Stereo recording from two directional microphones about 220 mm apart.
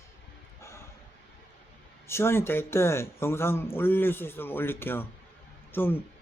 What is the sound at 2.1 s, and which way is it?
Speech, 10° left (ahead or behind).